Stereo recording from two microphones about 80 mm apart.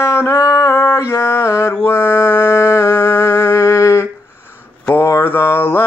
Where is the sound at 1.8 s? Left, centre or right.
Left.